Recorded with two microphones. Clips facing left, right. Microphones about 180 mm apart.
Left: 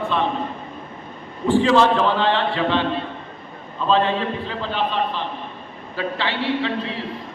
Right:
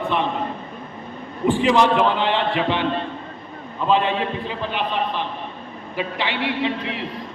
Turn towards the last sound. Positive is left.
turn(degrees=-15)  # may be behind; listen again after turning